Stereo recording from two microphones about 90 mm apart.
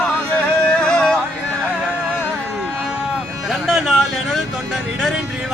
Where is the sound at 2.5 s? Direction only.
10° right (ahead or behind).